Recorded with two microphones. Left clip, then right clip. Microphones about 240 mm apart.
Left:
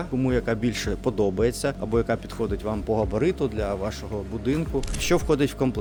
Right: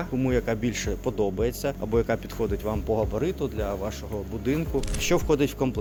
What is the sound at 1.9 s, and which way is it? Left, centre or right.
Speech, centre.